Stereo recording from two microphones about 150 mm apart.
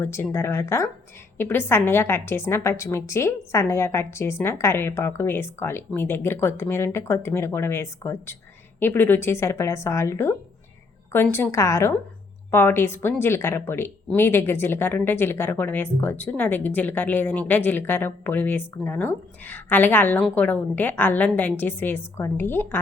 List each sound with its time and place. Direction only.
0.0 s speech: 15° left (ahead or behind)